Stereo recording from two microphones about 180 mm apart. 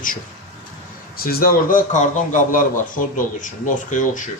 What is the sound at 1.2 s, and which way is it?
A man's voice, 55° left (ahead or behind).